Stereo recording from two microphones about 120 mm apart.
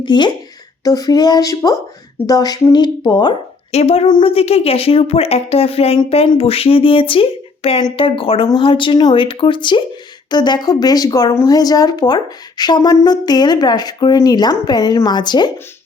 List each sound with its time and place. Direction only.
0.0 s speech: 40° left (ahead or behind)
3.7 s speech: 60° left (ahead or behind)
4.0 s speech: 45° left (ahead or behind)